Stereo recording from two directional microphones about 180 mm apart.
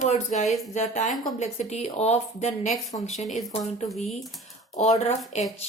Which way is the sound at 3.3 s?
Centre (ahead or behind).